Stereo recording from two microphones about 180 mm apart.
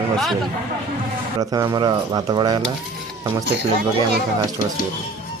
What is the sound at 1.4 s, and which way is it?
Speech, 20° right (ahead or behind).